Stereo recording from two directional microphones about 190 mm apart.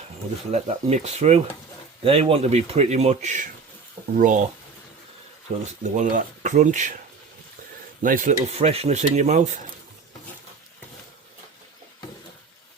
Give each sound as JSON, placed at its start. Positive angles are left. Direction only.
{"t": 0.5, "sound": "speech", "side_deg": -35}
{"t": 4.1, "sound": "stir", "side_deg": -45}
{"t": 5.5, "sound": "speech", "side_deg": -35}
{"t": 8.0, "sound": "stir", "side_deg": -45}
{"t": 8.4, "sound": "speech", "side_deg": -35}